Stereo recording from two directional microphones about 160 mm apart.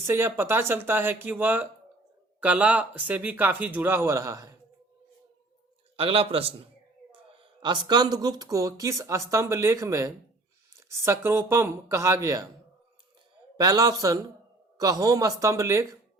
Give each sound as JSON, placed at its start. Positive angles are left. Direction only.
{"t": 0.0, "sound": "speech", "side_deg": -15}
{"t": 6.0, "sound": "a man's voice", "side_deg": -35}
{"t": 13.6, "sound": "speech", "side_deg": -20}